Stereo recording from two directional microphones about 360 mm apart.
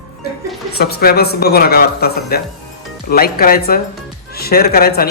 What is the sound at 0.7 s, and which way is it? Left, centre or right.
A woman's voice, left.